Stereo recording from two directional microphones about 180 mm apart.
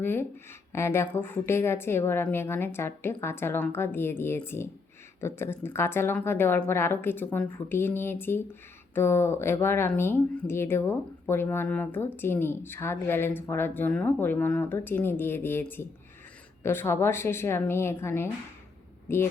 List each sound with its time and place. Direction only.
0.0 s speech: 10° left (ahead or behind)